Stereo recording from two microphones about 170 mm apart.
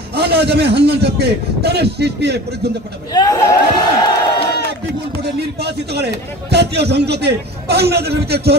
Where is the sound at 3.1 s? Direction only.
20° left (ahead or behind).